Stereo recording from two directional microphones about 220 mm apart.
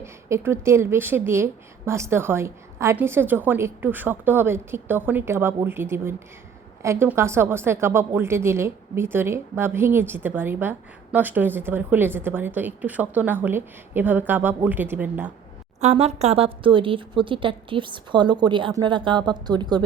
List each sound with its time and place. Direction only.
0.0 s a woman's voice: 10° right (ahead or behind)
15.8 s a woman's voice: 30° right (ahead or behind)